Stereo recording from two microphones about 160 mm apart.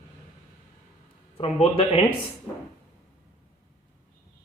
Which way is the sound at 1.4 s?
35° left (ahead or behind).